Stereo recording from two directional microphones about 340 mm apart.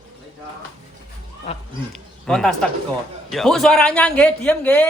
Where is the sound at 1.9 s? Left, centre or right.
Centre.